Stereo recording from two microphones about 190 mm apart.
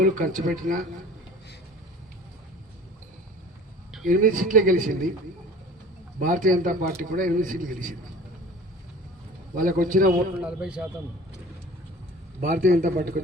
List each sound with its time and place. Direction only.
0.0 s speech: 45° right (ahead or behind)
4.0 s speech: 45° right (ahead or behind)
6.1 s speech: 45° right (ahead or behind)
9.6 s speech: 45° right (ahead or behind)
10.4 s a man's voice: 5° right (ahead or behind)
12.4 s speech: 45° right (ahead or behind)